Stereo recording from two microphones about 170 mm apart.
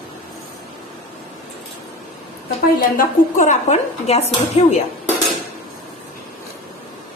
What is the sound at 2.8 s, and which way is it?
A woman's voice, 50° left (ahead or behind).